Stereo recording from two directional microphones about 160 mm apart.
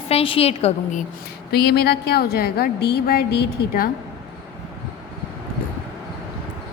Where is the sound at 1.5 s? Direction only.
80° left.